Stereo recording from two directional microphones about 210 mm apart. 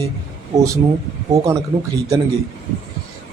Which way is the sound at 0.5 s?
30° right (ahead or behind).